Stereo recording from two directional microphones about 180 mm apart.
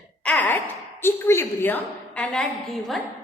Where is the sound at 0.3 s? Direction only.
10° left (ahead or behind).